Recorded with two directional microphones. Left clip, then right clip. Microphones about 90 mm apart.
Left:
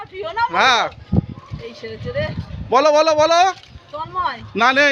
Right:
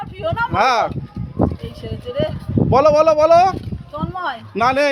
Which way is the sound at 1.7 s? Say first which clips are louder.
Left 1 dB; 50° left (ahead or behind).